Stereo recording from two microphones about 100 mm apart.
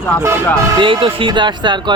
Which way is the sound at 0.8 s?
60° right (ahead or behind).